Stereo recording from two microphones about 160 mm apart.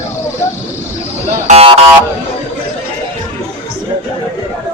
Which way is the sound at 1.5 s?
40° right (ahead or behind).